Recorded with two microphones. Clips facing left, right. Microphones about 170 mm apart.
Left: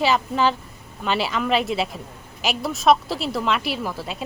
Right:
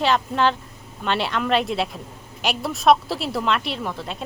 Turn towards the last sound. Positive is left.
turn(degrees=5)  # may be behind; listen again after turning